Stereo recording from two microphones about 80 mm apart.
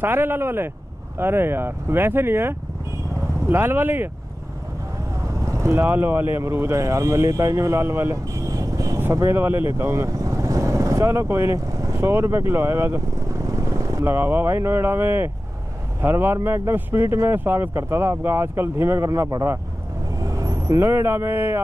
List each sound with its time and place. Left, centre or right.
0.0 s speech: right
5.4 s vehicle: right
5.8 s speech: right
9.1 s vehicle: right
14.0 s speech: right